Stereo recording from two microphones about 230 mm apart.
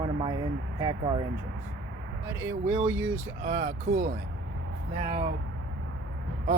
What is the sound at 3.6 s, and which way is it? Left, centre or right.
Speech, right.